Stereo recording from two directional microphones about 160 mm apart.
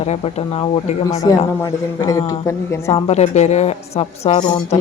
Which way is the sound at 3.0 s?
45° left (ahead or behind).